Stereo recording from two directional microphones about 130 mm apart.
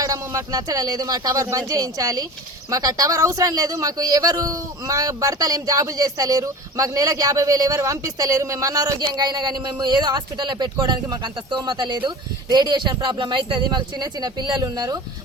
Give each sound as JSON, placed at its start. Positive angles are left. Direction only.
{"t": 0.0, "sound": "a man's voice", "side_deg": -25}